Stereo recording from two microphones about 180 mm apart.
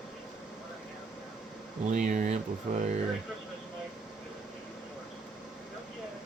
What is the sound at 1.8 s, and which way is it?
Speech, 40° right (ahead or behind).